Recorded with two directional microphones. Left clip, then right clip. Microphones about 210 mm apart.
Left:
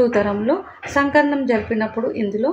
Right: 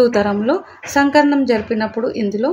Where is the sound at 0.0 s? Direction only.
35° right (ahead or behind).